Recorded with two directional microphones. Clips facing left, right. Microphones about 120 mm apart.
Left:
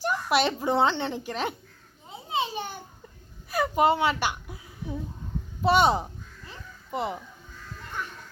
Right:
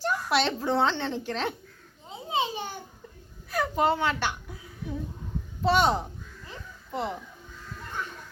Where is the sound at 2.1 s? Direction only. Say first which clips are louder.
Right 1 dB; 20° right (ahead or behind).